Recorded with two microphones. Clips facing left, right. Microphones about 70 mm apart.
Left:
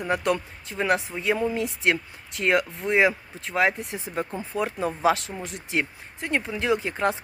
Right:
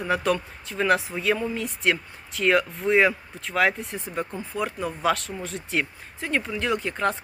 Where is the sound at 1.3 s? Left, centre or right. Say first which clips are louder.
Left 3 dB; centre.